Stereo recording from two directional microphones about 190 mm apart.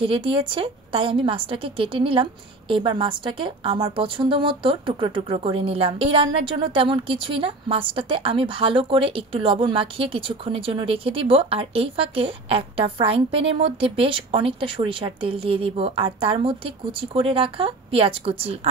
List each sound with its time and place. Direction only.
0.0 s a woman's voice: 25° right (ahead or behind)